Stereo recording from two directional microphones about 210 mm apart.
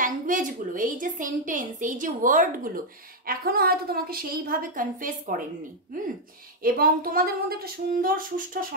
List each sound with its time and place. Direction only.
0.0 s a woman's voice: 40° right (ahead or behind)
6.6 s a woman's voice: 45° right (ahead or behind)